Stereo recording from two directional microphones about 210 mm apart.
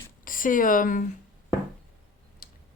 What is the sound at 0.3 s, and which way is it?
Speech, 40° left (ahead or behind).